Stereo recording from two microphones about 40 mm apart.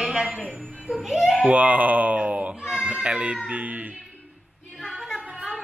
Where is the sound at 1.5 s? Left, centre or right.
Right.